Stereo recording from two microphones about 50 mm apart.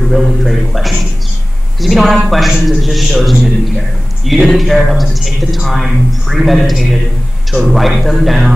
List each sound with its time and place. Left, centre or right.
0.1 s a man's voice: centre